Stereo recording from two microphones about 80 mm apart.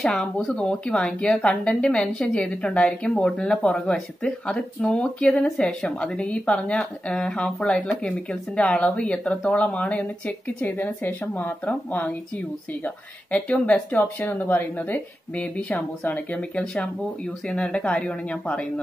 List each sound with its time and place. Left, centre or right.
0.1 s speech: centre